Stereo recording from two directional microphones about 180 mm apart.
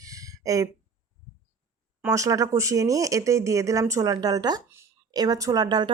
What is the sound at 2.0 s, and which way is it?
Speech, 15° right (ahead or behind).